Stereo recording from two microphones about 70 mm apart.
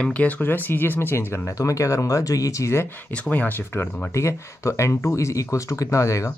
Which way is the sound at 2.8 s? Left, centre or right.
Left.